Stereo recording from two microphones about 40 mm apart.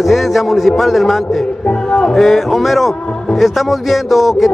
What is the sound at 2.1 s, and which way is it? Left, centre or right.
A man's voice, centre.